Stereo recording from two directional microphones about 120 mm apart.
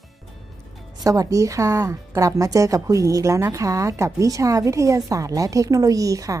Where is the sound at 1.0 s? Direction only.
30° right (ahead or behind).